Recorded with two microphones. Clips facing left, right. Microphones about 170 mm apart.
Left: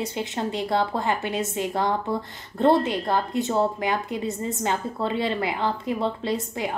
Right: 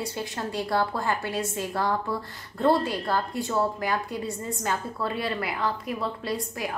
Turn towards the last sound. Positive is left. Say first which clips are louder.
# left 4 dB
turn(degrees=25)  # may be behind; listen again after turning